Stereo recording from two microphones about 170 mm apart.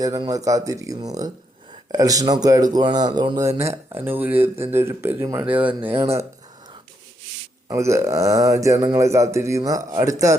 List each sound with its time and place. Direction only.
0.0 s speech: 20° right (ahead or behind)
7.7 s speech: 15° right (ahead or behind)